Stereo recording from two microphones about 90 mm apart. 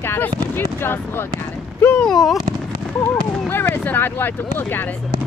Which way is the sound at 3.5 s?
25° left (ahead or behind).